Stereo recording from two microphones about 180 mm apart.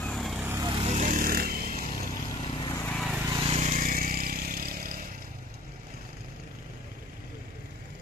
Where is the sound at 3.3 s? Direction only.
35° right (ahead or behind); by 4.9 s 55° right (ahead or behind).